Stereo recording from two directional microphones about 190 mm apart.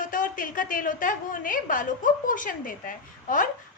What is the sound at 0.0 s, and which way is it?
A woman's voice, 45° left (ahead or behind).